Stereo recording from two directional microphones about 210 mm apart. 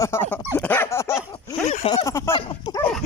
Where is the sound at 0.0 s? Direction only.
10° left (ahead or behind).